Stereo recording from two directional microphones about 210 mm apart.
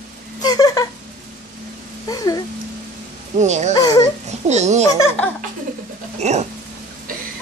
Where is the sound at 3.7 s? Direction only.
20° left (ahead or behind).